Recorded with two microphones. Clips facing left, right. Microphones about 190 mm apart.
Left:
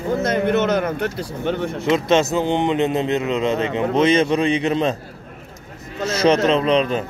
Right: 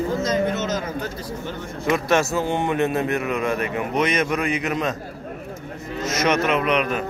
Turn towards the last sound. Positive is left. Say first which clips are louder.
# left 4 dB
turn(degrees=30)  # may be behind; listen again after turning